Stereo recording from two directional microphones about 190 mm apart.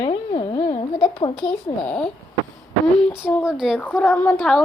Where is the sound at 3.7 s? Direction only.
10° left (ahead or behind).